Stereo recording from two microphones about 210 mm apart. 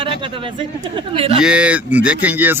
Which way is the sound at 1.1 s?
25° right (ahead or behind).